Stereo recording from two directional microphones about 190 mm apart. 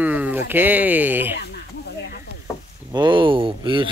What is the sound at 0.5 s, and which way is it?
Speech, 10° right (ahead or behind).